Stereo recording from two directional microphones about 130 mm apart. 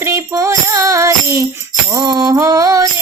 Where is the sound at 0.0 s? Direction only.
25° right (ahead or behind).